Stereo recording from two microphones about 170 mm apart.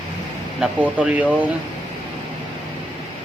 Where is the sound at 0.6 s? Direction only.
10° right (ahead or behind).